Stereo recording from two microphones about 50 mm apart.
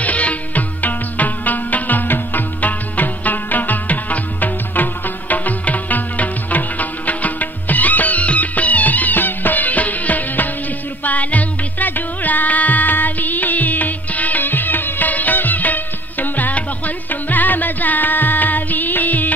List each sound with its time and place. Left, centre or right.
0.0 s music: left